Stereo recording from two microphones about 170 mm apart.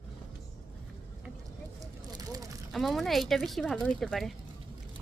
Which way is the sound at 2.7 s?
Centre (ahead or behind).